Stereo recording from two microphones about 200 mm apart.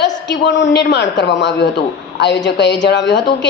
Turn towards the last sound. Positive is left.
turn(degrees=65)  # may be behind; listen again after turning